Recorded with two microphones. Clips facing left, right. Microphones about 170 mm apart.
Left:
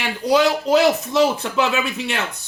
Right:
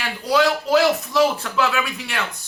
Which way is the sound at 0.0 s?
20° left (ahead or behind).